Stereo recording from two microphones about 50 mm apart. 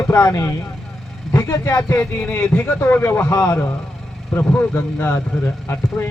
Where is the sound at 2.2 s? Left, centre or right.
Left.